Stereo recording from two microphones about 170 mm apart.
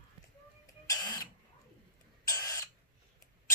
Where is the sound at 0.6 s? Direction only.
20° left (ahead or behind).